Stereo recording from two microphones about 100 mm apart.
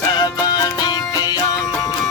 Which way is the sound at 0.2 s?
40° left (ahead or behind).